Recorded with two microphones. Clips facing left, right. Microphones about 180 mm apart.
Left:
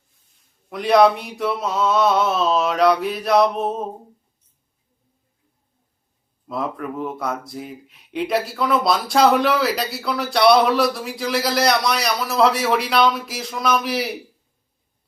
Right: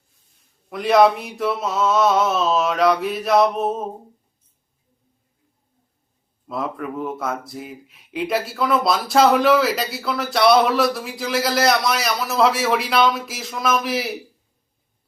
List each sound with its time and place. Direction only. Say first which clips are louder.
0.7 s speech: even; centre (ahead or behind)
6.5 s speech: even; centre (ahead or behind)